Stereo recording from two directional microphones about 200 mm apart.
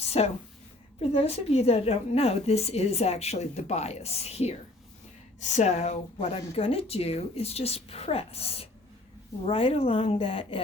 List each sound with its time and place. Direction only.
0.0 s a woman's voice: 30° left (ahead or behind)